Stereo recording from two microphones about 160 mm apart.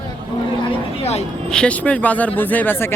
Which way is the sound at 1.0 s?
40° left (ahead or behind).